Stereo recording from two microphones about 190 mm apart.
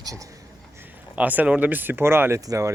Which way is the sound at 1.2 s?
5° right (ahead or behind).